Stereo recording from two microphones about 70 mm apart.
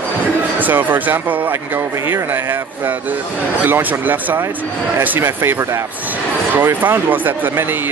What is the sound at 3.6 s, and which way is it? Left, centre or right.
Speech, right.